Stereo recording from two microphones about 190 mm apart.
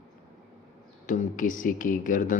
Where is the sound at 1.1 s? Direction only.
40° left (ahead or behind).